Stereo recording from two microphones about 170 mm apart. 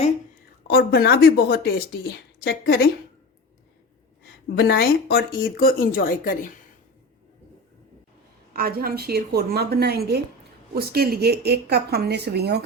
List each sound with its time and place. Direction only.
0.7 s a woman's voice: 65° left (ahead or behind)
4.5 s a woman's voice: 75° left (ahead or behind); by 6.5 s 55° left (ahead or behind)
8.5 s speech: 60° right (ahead or behind)